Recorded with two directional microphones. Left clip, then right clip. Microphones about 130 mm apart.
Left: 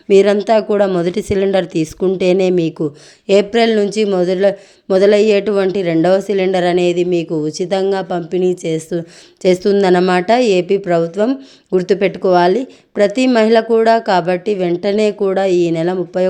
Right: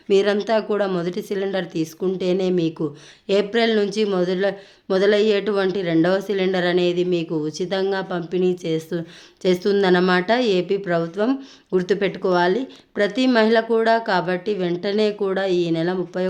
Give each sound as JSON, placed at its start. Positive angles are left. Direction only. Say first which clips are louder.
{"t": 0.1, "sound": "a woman's voice", "louder": "left 8 dB", "side_deg": 45}